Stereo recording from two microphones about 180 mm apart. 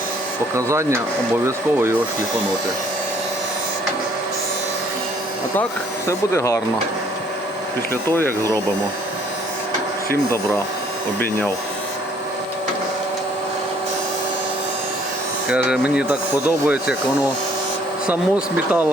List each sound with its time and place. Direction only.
0.5 s speech: 15° right (ahead or behind)
6.1 s speech: 15° left (ahead or behind)
15.4 s speech: 5° right (ahead or behind)
18.1 s speech: 10° right (ahead or behind)